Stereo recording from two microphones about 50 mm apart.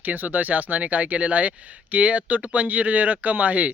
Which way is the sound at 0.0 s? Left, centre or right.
Right.